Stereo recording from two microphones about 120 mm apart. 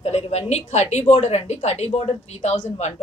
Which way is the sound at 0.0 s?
65° left (ahead or behind).